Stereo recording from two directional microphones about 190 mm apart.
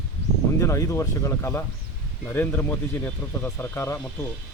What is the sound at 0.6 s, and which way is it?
Speech, 15° left (ahead or behind).